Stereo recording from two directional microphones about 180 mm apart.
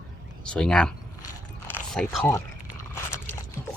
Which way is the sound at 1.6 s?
5° left (ahead or behind).